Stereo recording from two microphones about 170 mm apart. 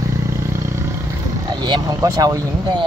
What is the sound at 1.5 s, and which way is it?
Speech, 25° right (ahead or behind).